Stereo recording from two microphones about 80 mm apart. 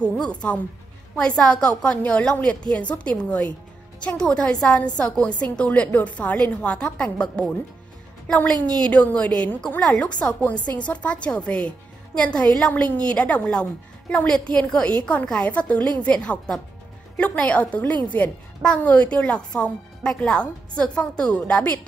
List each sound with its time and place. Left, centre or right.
0.3 s a woman's voice: centre
8.6 s a woman's voice: centre